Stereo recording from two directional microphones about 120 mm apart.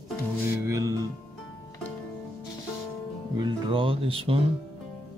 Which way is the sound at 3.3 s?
40° right (ahead or behind).